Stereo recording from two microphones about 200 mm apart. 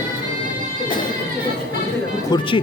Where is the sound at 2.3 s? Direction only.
20° left (ahead or behind).